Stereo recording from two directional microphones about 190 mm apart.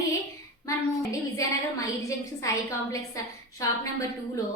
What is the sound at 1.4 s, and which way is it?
A woman's voice, 15° left (ahead or behind).